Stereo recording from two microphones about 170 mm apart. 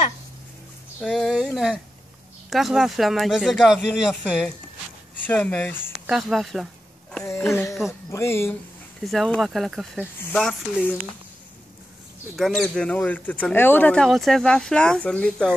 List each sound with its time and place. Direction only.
1.0 s speech: 5° left (ahead or behind)
6.0 s a sound: centre (ahead or behind)
8.1 s speech: 15° left (ahead or behind)
9.0 s speech: centre (ahead or behind)
12.4 s speech: 5° left (ahead or behind)